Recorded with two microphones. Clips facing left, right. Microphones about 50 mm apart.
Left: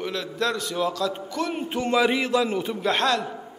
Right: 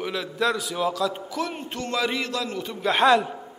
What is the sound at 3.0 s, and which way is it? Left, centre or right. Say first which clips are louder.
Speech: right 9 dB; centre.